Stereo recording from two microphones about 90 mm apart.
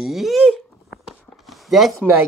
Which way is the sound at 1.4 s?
Centre (ahead or behind).